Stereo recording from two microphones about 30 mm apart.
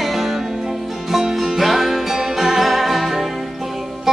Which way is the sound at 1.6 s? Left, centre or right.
Centre.